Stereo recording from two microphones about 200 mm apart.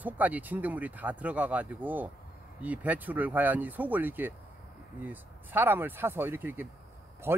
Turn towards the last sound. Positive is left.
turn(degrees=-10)  # may be behind; listen again after turning